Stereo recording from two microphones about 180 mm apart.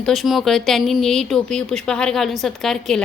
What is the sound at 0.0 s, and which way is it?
A woman's voice, centre (ahead or behind).